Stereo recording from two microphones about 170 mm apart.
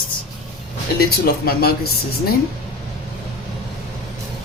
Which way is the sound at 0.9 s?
65° left (ahead or behind).